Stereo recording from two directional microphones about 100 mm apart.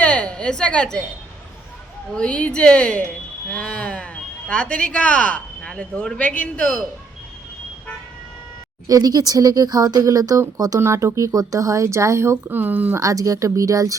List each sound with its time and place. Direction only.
0.0 s a woman's voice: 10° left (ahead or behind)
2.1 s speech: 10° left (ahead or behind)
8.9 s speech: 40° right (ahead or behind); by 13.0 s 15° right (ahead or behind)
13.0 s speech: 35° right (ahead or behind)